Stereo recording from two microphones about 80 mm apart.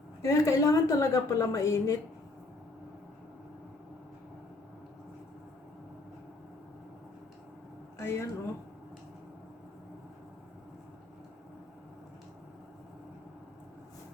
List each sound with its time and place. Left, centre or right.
0.2 s a woman's voice: left
7.9 s speech: left